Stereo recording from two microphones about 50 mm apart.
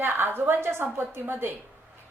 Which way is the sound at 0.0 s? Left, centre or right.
Right.